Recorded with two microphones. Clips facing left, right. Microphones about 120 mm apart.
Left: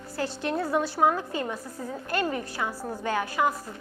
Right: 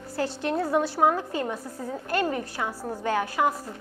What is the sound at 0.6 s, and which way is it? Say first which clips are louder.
Speech: right 2 dB; 35° right (ahead or behind).